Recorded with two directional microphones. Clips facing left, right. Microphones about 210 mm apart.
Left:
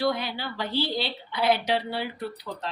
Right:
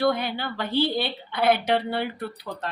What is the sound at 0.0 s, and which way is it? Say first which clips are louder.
Speech: right 3 dB; 55° right (ahead or behind).